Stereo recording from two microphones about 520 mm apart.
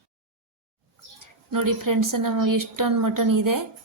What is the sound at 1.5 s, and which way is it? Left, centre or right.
A woman's voice, right.